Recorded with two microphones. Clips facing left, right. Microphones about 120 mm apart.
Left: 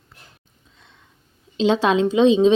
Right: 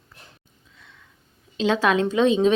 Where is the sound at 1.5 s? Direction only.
20° left (ahead or behind).